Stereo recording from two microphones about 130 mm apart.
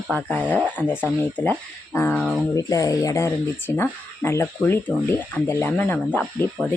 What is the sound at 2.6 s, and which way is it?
Speech, 25° left (ahead or behind).